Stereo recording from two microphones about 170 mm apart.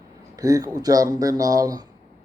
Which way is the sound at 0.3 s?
20° right (ahead or behind).